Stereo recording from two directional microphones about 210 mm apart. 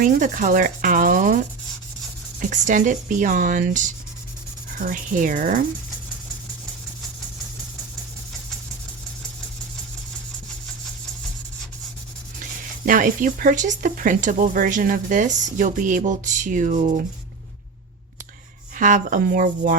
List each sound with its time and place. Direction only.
0.0 s speech: 40° right (ahead or behind)
2.4 s speech: 35° right (ahead or behind)
12.8 s speech: 40° right (ahead or behind)
18.8 s speech: 40° right (ahead or behind)